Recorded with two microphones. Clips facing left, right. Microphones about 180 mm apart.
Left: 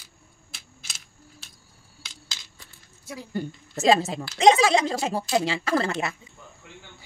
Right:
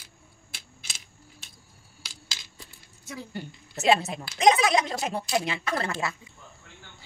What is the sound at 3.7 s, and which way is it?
A woman's voice, 30° left (ahead or behind).